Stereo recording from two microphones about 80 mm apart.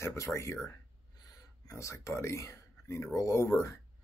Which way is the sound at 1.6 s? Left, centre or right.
Left.